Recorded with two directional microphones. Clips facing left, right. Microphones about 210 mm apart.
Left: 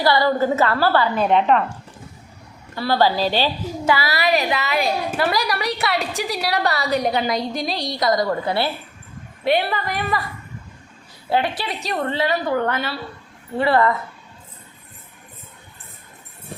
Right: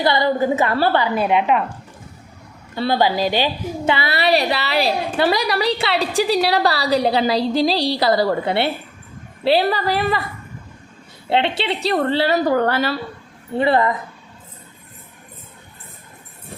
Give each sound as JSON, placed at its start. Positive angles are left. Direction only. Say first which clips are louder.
{"t": 0.0, "sound": "a woman's voice", "louder": "even", "side_deg": -20}
{"t": 2.7, "sound": "a woman's voice", "louder": "right 1 dB", "side_deg": -20}
{"t": 11.3, "sound": "a woman's voice", "louder": "right 3 dB", "side_deg": -25}
{"t": 13.6, "sound": "a woman's voice", "louder": "right 1 dB", "side_deg": -20}